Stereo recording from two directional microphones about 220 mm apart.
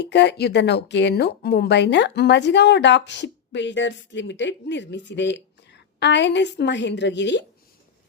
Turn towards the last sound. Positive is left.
turn(degrees=55)  # may be behind; listen again after turning